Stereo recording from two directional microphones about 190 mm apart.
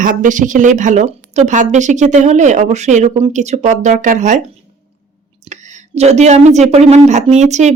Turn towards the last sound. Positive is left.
turn(degrees=-40)  # may be behind; listen again after turning